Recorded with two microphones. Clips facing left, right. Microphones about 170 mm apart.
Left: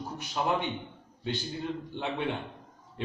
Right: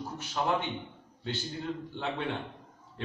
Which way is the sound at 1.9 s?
15° left (ahead or behind).